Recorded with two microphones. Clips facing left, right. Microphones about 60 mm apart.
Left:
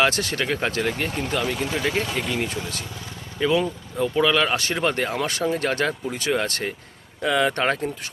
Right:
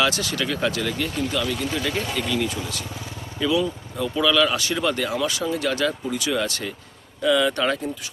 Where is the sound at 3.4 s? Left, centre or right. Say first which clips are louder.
Left 1 dB; left.